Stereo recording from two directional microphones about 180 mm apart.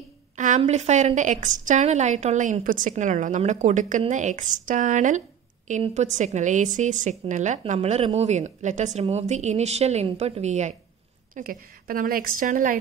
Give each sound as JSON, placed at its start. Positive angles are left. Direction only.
{"t": 0.4, "sound": "a woman's voice", "side_deg": -40}
{"t": 11.3, "sound": "a woman's voice", "side_deg": -50}